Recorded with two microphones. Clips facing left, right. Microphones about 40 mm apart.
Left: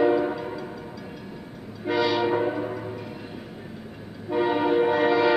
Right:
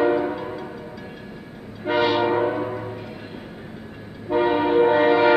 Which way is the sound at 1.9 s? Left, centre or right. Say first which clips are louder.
Right 3 dB; right.